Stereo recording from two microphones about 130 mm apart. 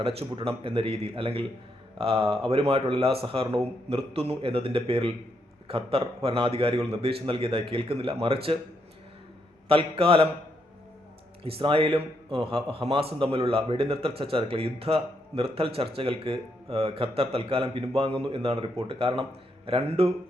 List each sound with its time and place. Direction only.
0.0 s a man's voice: 45° right (ahead or behind)
9.6 s a man's voice: 45° right (ahead or behind)
11.4 s a man's voice: 45° right (ahead or behind)